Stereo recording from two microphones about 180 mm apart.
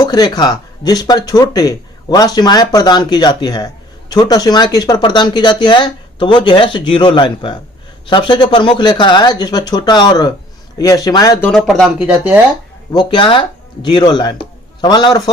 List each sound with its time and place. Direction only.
0.0 s speech: 25° left (ahead or behind)
11.4 s speech: centre (ahead or behind)
12.9 s a man's voice: 25° left (ahead or behind)